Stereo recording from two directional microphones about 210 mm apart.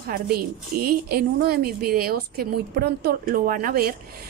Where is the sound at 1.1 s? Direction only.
50° right (ahead or behind).